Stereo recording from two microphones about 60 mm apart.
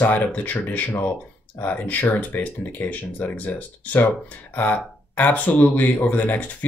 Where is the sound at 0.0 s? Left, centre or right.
Left.